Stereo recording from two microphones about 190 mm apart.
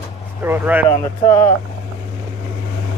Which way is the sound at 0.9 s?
20° left (ahead or behind).